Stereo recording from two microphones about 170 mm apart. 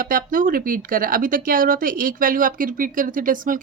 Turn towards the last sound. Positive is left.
turn(degrees=-55)  # may be behind; listen again after turning